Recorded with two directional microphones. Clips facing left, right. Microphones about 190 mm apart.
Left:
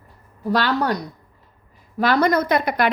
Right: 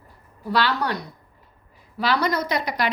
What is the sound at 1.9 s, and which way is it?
Speech, 50° left (ahead or behind).